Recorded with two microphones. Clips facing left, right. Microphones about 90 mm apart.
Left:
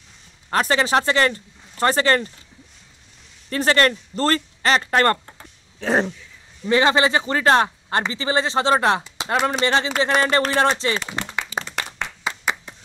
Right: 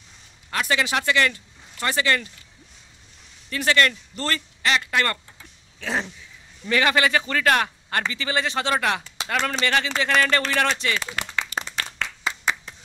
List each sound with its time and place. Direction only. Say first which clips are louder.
0.5 s speech: left 5 dB; 40° left (ahead or behind)
3.4 s speech: left 3 dB; 40° left (ahead or behind)
5.8 s dog: left 7 dB; 40° left (ahead or behind)
6.7 s a man's voice: left 3 dB; 25° left (ahead or behind)
10.5 s clapping: left 4 dB; 30° left (ahead or behind)